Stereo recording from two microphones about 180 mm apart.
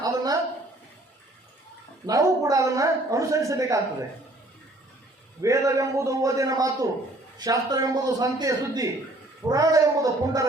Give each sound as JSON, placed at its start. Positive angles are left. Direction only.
{"t": 0.0, "sound": "a sound", "side_deg": -20}
{"t": 2.0, "sound": "a woman's voice", "side_deg": -20}
{"t": 5.4, "sound": "a woman's voice", "side_deg": -15}